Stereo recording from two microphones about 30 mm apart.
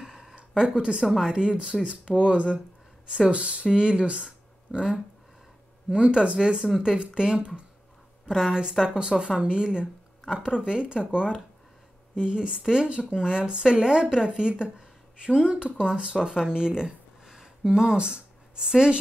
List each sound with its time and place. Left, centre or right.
0.0 s a sound: right
0.6 s speech: right
4.7 s a woman's voice: centre
5.9 s speech: right
8.3 s a woman's voice: centre
8.8 s speech: right